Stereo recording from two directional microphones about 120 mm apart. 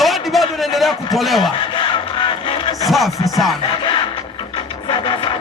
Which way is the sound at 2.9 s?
Centre (ahead or behind).